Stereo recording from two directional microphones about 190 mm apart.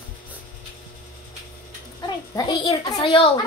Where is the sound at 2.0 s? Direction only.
20° left (ahead or behind).